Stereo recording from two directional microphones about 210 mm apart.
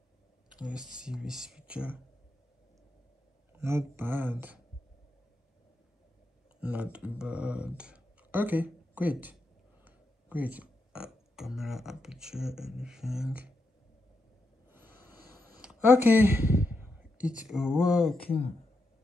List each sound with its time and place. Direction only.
0.6 s speech: 5° right (ahead or behind)
3.5 s speech: 10° right (ahead or behind)
6.6 s speech: 5° right (ahead or behind)
14.7 s a sound: 10° right (ahead or behind)
15.1 s a sound: 45° right (ahead or behind)
15.6 s speech: 5° right (ahead or behind)